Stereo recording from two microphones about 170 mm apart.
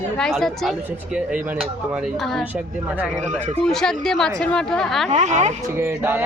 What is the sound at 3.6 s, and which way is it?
Speech, 5° left (ahead or behind).